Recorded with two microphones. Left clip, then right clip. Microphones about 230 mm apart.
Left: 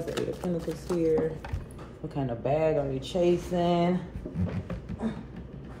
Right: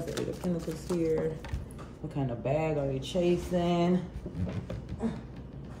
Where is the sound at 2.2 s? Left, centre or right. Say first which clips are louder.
Left 3 dB; centre.